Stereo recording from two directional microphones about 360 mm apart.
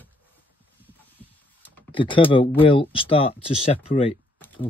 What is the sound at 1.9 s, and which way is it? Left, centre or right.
Speech, centre.